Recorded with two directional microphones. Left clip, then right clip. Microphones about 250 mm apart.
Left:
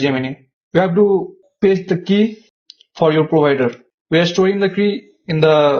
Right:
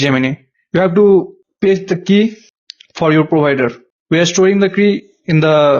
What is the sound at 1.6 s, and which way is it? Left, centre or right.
Speech, right.